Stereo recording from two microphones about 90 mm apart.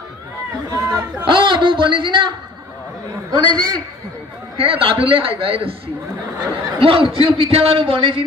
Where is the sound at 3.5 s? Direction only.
45° right (ahead or behind).